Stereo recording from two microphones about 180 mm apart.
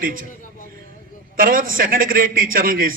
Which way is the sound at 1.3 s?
50° right (ahead or behind).